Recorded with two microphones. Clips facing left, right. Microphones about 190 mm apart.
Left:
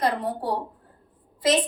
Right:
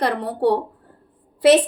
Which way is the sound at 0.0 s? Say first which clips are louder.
Right 6 dB; 70° right (ahead or behind).